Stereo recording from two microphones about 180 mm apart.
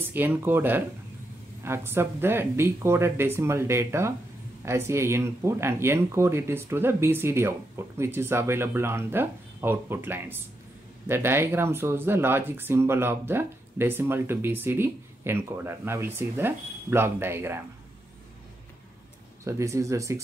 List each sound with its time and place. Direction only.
0.1 s speech: 10° right (ahead or behind)
19.4 s speech: 15° right (ahead or behind)